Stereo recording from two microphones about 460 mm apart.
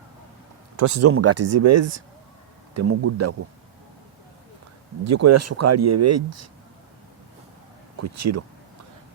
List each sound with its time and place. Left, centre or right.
0.8 s speech: right
5.0 s speech: right
8.0 s speech: right